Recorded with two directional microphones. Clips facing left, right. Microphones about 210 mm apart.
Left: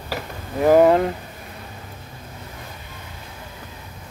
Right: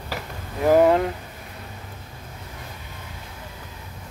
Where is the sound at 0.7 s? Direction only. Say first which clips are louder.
Left 2 dB; 45° left (ahead or behind).